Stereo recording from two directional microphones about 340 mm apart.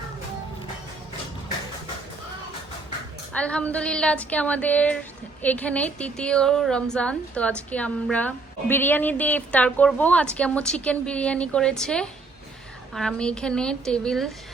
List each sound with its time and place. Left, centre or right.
3.3 s a woman's voice: centre